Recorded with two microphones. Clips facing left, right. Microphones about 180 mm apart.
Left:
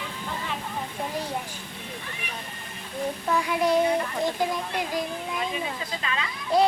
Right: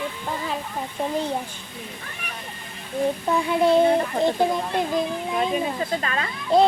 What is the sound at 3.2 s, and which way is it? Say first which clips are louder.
Speech: right 3 dB; 25° right (ahead or behind).